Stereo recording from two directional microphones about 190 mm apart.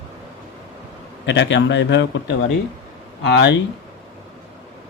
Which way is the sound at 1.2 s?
70° left (ahead or behind).